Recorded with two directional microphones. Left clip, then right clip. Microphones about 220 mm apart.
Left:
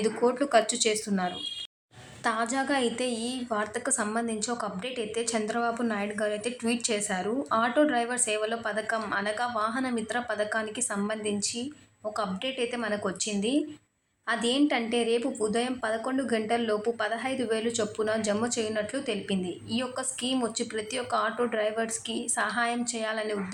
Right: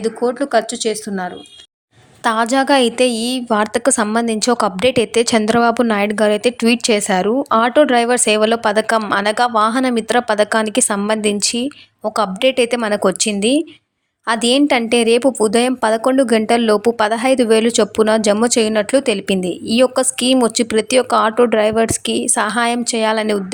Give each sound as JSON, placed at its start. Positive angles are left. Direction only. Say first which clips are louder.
{"t": 0.0, "sound": "speech", "louder": "right 8 dB", "side_deg": -25}
{"t": 2.2, "sound": "a woman's voice", "louder": "right 13 dB", "side_deg": -40}